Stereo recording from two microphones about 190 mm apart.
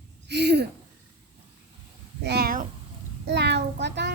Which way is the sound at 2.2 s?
55° right (ahead or behind).